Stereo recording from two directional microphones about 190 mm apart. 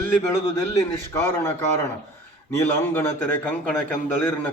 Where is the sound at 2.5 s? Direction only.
15° left (ahead or behind).